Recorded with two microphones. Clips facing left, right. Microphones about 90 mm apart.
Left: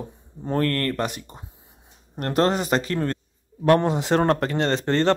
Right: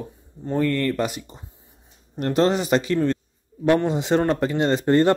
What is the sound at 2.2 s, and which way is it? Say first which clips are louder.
Speech: right 1 dB; 45° left (ahead or behind).